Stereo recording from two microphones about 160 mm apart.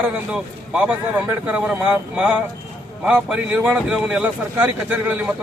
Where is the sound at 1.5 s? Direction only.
5° right (ahead or behind).